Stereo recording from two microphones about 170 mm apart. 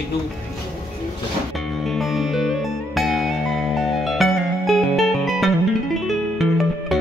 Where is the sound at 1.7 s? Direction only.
Centre (ahead or behind).